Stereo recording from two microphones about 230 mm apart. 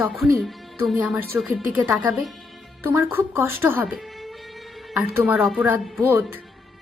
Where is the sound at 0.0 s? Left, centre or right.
Centre.